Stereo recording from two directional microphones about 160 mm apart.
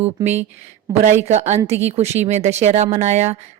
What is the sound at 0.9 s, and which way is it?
Speech, 20° right (ahead or behind).